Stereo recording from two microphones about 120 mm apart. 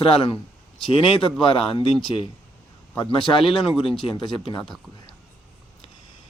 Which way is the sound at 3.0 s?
45° left (ahead or behind).